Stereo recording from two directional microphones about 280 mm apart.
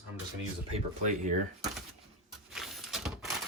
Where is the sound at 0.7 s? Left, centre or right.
Right.